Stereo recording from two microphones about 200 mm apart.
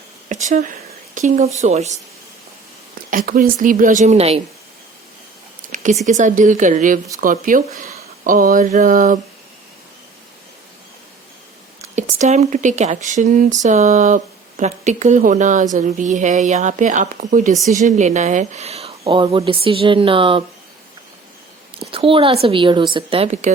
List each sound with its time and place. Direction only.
0.3 s a sound: 40° right (ahead or behind)
1.6 s speech: 35° right (ahead or behind)
3.1 s speech: 40° right (ahead or behind)
5.6 s a sound: 40° right (ahead or behind)
6.1 s speech: 40° right (ahead or behind)
11.8 s speech: 35° right (ahead or behind)
21.8 s speech: 25° right (ahead or behind)